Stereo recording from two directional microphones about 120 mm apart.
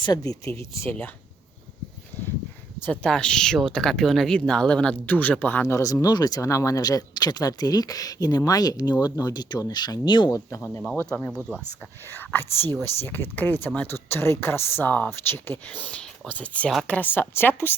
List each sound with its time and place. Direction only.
0.0 s speech: 30° left (ahead or behind)
2.8 s speech: 10° left (ahead or behind); by 10.6 s 30° left (ahead or behind)
10.9 s speech: 15° left (ahead or behind)